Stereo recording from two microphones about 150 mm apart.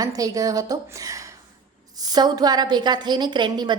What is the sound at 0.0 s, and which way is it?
A woman's voice, 25° right (ahead or behind).